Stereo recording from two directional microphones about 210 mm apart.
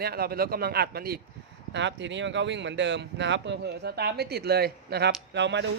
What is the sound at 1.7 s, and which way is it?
Speech, 60° right (ahead or behind).